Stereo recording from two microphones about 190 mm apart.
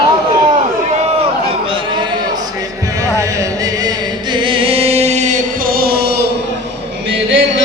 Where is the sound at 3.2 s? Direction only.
20° right (ahead or behind); by 6.3 s 60° right (ahead or behind).